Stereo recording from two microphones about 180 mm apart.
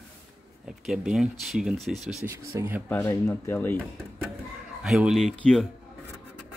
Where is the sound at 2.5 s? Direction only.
15° right (ahead or behind).